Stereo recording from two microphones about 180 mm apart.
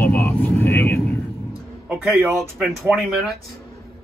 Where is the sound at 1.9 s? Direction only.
10° right (ahead or behind).